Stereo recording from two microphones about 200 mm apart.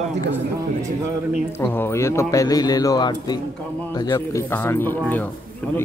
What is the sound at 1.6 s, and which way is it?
Speech, 10° left (ahead or behind).